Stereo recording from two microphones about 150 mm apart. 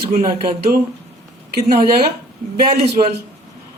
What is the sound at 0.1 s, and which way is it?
Speech, 75° right (ahead or behind).